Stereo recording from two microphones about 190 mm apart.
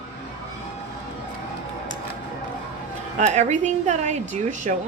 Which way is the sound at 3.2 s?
35° right (ahead or behind).